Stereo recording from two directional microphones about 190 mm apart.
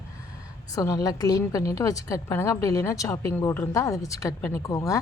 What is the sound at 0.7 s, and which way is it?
A woman's voice, 20° left (ahead or behind).